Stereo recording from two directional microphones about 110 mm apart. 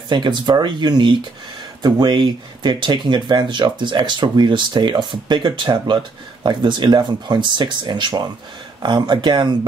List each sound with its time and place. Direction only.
0.1 s speech: 45° right (ahead or behind)